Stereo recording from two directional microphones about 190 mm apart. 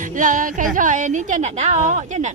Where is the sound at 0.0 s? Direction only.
45° right (ahead or behind).